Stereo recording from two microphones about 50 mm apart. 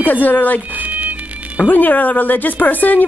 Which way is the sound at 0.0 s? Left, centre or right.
Left.